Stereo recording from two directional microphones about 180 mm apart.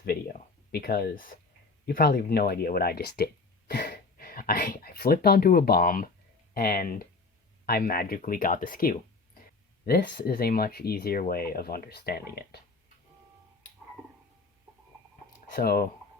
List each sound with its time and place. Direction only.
0.0 s speech: 60° left (ahead or behind)
15.5 s speech: 55° left (ahead or behind)